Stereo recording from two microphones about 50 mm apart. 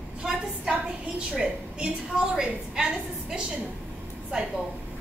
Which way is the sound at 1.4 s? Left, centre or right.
Centre.